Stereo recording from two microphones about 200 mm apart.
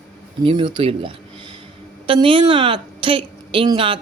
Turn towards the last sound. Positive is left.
turn(degrees=-25)  # may be behind; listen again after turning